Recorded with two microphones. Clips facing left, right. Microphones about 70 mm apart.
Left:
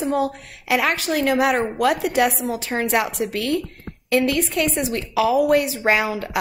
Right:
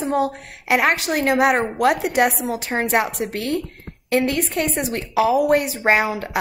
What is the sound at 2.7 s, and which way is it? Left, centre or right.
A woman's voice, right.